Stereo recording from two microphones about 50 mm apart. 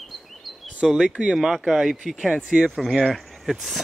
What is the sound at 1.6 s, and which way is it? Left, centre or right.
Speech, centre.